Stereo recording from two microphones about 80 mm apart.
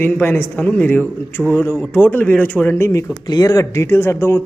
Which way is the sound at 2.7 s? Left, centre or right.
Left.